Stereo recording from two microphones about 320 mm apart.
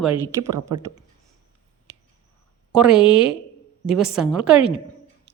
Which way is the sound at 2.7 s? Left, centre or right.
Centre.